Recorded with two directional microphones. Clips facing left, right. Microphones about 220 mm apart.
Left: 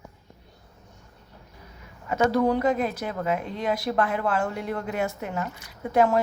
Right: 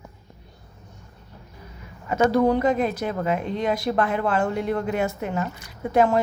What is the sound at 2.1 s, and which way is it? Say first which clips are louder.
A woman's voice: right 3 dB; 20° right (ahead or behind).